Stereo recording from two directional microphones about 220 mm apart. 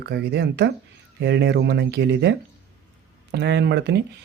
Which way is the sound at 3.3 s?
50° right (ahead or behind).